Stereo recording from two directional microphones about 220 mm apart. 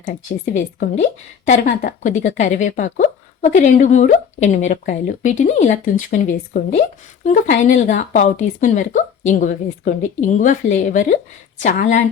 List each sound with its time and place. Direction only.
0.1 s speech: 40° left (ahead or behind)